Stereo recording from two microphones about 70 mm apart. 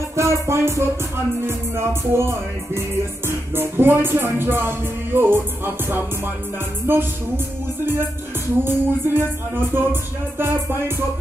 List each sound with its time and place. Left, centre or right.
0.1 s music: right
8.6 s music: right